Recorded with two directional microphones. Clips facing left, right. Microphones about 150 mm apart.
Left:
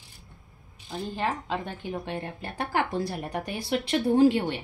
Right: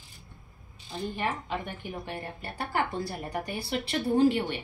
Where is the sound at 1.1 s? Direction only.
90° left.